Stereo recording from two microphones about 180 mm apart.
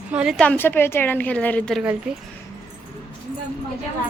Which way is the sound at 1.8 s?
5° right (ahead or behind).